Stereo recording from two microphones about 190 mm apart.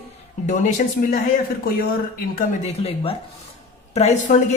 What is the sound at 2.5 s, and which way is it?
A woman's voice, 35° left (ahead or behind).